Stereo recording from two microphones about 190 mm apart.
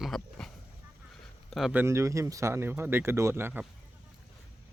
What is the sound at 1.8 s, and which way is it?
Speech, 15° right (ahead or behind).